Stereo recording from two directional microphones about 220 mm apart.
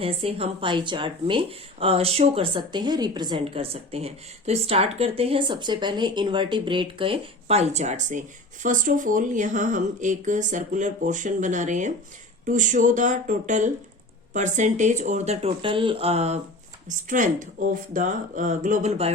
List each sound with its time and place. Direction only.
0.0 s speech: 25° right (ahead or behind)